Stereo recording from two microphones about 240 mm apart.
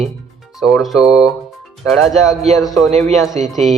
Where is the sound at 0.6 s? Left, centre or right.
Centre.